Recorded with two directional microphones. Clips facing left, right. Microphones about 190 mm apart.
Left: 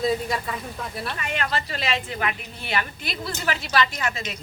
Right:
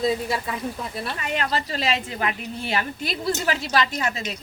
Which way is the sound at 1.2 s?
35° right (ahead or behind).